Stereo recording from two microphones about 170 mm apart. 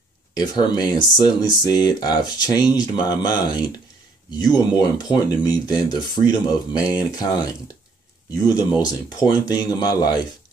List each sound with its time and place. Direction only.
0.3 s speech: 25° left (ahead or behind)